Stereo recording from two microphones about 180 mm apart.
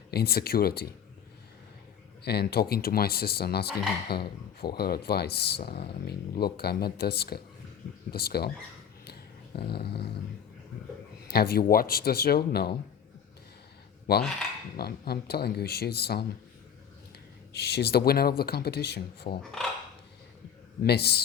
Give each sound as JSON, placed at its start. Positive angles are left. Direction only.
{"t": 0.1, "sound": "speech", "side_deg": 60}
{"t": 2.2, "sound": "speech", "side_deg": 65}
{"t": 9.6, "sound": "speech", "side_deg": 65}
{"t": 11.3, "sound": "speech", "side_deg": 60}
{"t": 14.1, "sound": "speech", "side_deg": 60}
{"t": 17.5, "sound": "speech", "side_deg": 65}
{"t": 19.4, "sound": "speech", "side_deg": 0}
{"t": 20.8, "sound": "speech", "side_deg": 65}